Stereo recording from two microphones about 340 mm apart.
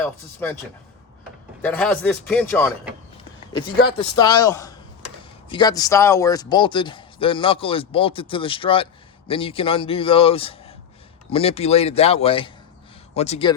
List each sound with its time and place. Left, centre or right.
0.0 s speech: centre
1.6 s speech: centre
3.8 s a man's voice: centre